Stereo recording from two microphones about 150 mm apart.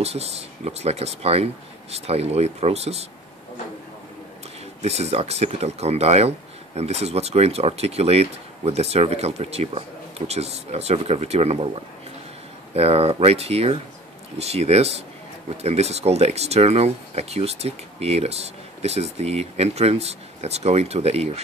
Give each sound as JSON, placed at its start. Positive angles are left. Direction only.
{"t": 0.0, "sound": "speech", "side_deg": -45}
{"t": 4.8, "sound": "speech", "side_deg": -45}
{"t": 12.7, "sound": "speech", "side_deg": -45}